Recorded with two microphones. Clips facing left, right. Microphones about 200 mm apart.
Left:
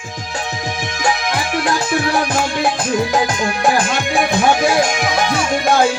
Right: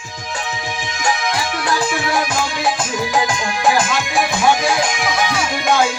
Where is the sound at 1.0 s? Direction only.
55° left (ahead or behind).